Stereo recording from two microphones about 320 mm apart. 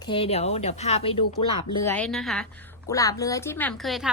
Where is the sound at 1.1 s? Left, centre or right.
Left.